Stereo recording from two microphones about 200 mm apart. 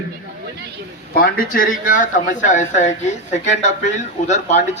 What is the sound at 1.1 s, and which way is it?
Speech, 45° left (ahead or behind).